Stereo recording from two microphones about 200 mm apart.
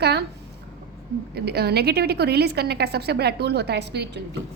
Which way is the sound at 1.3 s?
55° right (ahead or behind).